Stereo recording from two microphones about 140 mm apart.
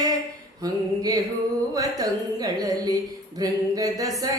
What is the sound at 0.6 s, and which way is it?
Music, 25° right (ahead or behind).